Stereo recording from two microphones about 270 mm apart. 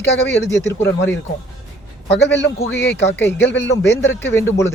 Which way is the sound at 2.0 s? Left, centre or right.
Left.